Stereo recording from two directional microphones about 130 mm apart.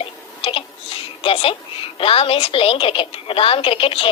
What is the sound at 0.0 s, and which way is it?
Speech, 45° left (ahead or behind).